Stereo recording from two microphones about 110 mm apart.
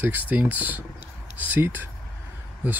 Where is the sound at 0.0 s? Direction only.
15° right (ahead or behind).